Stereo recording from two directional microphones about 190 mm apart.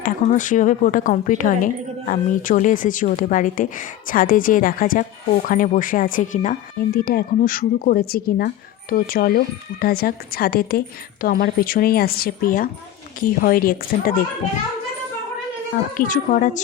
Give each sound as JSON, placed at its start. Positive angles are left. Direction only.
{"t": 0.0, "sound": "a woman's voice", "side_deg": 40}
{"t": 16.0, "sound": "a woman's voice", "side_deg": 40}